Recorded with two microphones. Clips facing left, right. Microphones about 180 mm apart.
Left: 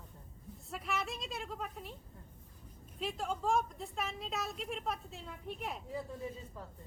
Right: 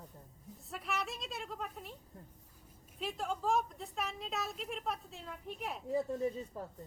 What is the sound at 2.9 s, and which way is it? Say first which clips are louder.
A woman's voice: even; centre (ahead or behind).